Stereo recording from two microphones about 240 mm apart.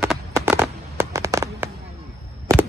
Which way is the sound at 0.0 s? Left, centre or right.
Centre.